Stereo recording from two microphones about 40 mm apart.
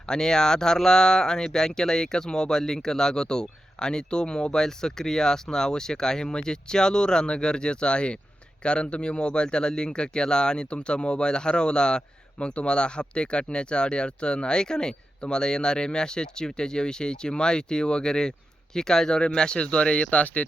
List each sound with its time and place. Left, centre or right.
0.1 s speech: centre; by 20.5 s left